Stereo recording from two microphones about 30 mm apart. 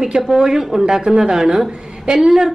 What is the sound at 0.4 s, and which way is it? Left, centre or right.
A woman's voice, centre.